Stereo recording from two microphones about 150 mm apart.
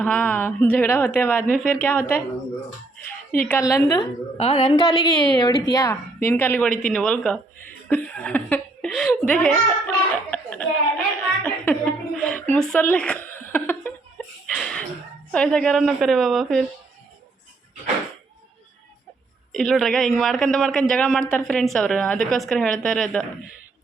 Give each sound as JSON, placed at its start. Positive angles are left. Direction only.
{"t": 0.0, "sound": "a woman's voice", "side_deg": 5}
{"t": 3.6, "sound": "a woman's voice", "side_deg": 20}
{"t": 4.0, "sound": "a woman's voice", "side_deg": 40}
{"t": 6.2, "sound": "a man's voice", "side_deg": 10}
{"t": 14.4, "sound": "a sound", "side_deg": 5}
{"t": 15.3, "sound": "a man's voice", "side_deg": 5}
{"t": 19.5, "sound": "a man's voice", "side_deg": 0}